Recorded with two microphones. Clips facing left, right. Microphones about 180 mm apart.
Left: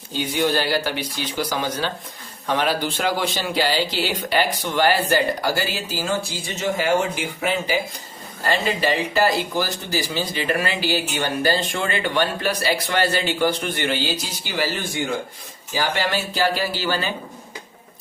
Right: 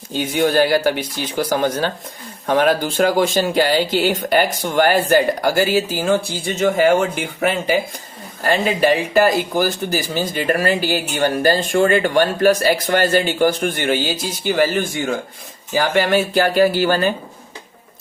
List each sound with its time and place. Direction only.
0.2 s speech: 50° right (ahead or behind)
8.8 s speech: 50° right (ahead or behind)